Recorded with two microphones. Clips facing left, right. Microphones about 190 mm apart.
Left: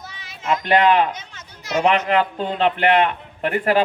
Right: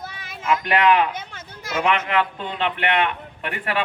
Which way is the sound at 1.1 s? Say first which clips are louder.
Even; 55° right (ahead or behind).